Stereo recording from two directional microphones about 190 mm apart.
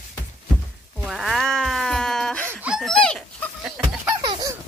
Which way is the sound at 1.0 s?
Centre (ahead or behind).